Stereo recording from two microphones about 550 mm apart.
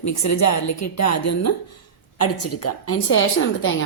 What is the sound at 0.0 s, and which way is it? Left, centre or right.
Speech, left.